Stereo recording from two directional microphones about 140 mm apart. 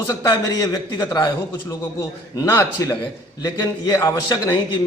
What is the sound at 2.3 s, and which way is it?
Speech, 20° left (ahead or behind).